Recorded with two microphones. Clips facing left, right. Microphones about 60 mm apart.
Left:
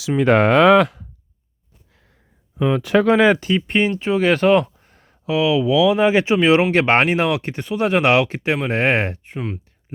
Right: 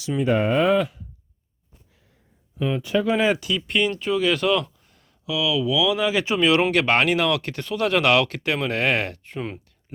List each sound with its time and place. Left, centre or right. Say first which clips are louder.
0.2 s speech: left 7 dB; left
2.7 s speech: left 7 dB; left
3.4 s speech: left 4 dB; left